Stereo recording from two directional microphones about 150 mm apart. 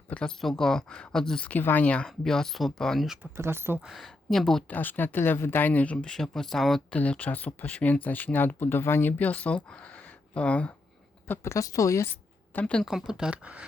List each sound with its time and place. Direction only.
0.1 s speech: 5° left (ahead or behind)
3.3 s speech: 15° right (ahead or behind)
3.8 s speech: centre (ahead or behind)
4.8 s a woman's voice: 10° left (ahead or behind)
12.5 s speech: 10° left (ahead or behind); by 13.7 s 10° right (ahead or behind)